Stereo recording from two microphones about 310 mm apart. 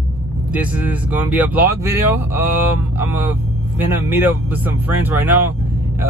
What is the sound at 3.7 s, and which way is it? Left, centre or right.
Speech, centre.